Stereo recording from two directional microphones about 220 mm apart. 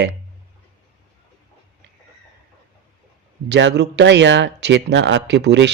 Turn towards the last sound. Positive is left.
turn(degrees=-50)  # may be behind; listen again after turning